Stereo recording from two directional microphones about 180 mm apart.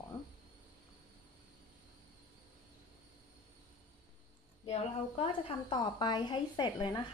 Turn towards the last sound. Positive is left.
turn(degrees=25)  # may be behind; listen again after turning